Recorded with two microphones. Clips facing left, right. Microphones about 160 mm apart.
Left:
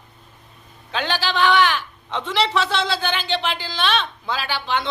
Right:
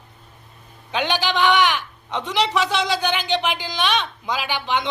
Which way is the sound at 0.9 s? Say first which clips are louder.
Right 1 dB; 15° right (ahead or behind).